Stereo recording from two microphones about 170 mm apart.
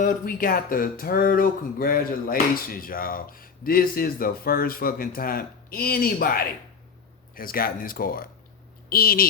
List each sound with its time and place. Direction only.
0.0 s speech: 55° left (ahead or behind)